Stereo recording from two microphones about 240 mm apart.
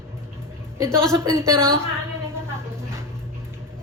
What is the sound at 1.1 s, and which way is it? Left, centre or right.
Speech, centre.